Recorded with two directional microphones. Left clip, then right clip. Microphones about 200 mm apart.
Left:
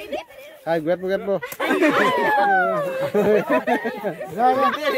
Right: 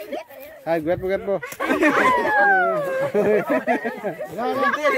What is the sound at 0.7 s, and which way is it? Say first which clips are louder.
Speech: even; 10° left (ahead or behind).